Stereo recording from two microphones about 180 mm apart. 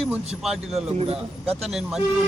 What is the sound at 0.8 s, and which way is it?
Speech, 35° right (ahead or behind).